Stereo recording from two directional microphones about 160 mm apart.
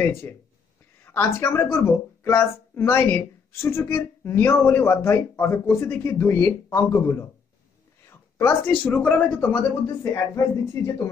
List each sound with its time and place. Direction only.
0.0 s a woman's voice: 15° left (ahead or behind)